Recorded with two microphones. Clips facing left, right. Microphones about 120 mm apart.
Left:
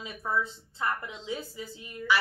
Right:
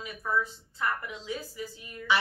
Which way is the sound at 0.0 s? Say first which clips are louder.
Even; 25° left (ahead or behind).